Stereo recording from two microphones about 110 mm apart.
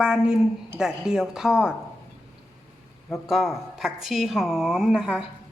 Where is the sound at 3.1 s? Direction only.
Centre (ahead or behind).